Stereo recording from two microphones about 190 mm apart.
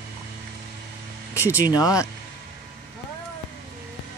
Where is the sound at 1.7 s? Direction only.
20° left (ahead or behind).